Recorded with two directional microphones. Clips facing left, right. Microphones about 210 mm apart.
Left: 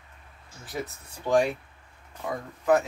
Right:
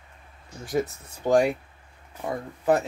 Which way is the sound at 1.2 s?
40° right (ahead or behind).